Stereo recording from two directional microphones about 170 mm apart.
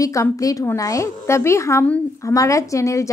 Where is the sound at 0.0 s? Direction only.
20° left (ahead or behind).